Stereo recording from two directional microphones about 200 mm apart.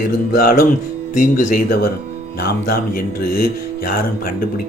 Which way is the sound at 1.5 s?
40° left (ahead or behind).